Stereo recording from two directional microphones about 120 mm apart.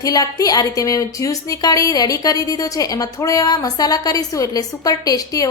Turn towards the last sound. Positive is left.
turn(degrees=30)  # may be behind; listen again after turning